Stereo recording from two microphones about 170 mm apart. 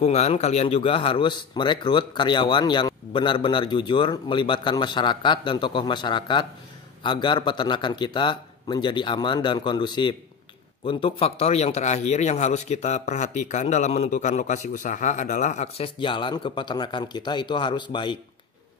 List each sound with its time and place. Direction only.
0.0 s a man's voice: 40° left (ahead or behind)